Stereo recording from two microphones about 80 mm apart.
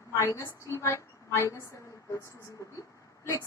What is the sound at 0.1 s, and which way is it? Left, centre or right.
A woman's voice, left.